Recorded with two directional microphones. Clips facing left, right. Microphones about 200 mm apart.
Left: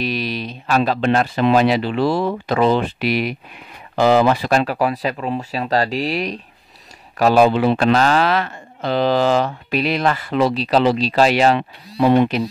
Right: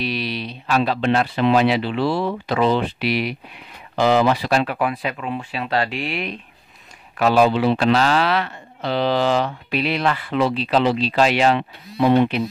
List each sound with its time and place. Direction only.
0.0 s speech: 45° left (ahead or behind)